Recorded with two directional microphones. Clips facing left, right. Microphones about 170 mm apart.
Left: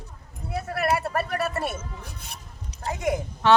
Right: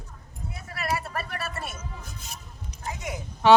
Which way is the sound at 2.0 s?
60° left (ahead or behind).